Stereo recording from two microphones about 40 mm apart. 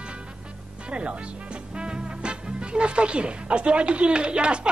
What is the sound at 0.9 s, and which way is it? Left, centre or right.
Speech, right.